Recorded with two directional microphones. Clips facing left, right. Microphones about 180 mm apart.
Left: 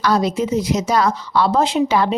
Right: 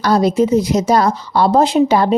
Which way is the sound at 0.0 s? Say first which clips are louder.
Right 5 dB; 35° right (ahead or behind).